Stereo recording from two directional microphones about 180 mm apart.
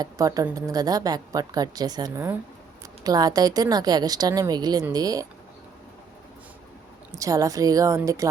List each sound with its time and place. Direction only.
0.0 s a woman's voice: 20° right (ahead or behind)
7.2 s a woman's voice: 20° right (ahead or behind)